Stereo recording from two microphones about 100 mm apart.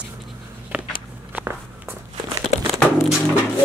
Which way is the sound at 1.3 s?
20° right (ahead or behind).